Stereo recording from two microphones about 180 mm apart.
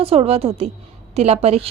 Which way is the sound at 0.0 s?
35° right (ahead or behind).